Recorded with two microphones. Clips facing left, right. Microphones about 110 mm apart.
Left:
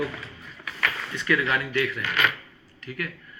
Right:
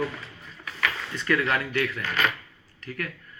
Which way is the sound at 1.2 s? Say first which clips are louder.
Even; 40° right (ahead or behind).